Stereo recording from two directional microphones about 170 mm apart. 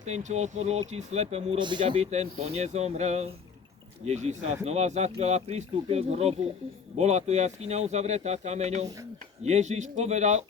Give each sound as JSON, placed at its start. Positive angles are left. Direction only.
{"t": 0.0, "sound": "speech", "side_deg": -45}
{"t": 1.9, "sound": "speech", "side_deg": -40}